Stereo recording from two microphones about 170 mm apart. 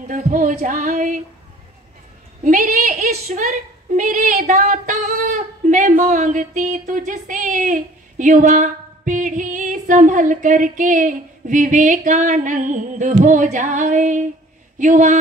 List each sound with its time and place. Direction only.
0.1 s speech: 50° right (ahead or behind)
2.4 s a sound: 55° right (ahead or behind)
3.3 s a woman's voice: 45° right (ahead or behind)